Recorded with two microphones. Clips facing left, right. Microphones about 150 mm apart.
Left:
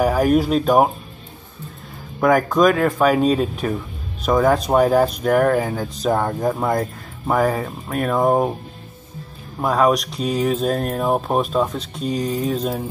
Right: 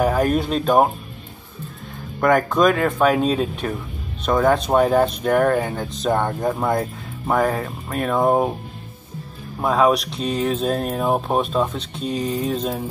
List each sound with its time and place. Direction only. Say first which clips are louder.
0.0 s speech: left 2 dB; 5° left (ahead or behind)
2.1 s speech: left 1 dB; centre (ahead or behind)
9.6 s speech: even; centre (ahead or behind)